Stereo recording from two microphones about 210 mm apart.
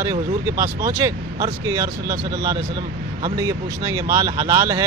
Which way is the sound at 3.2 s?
15° right (ahead or behind).